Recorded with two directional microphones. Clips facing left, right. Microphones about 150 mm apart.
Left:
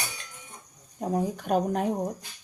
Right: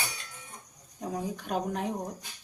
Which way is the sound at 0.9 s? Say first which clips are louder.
Left 6 dB; 45° left (ahead or behind).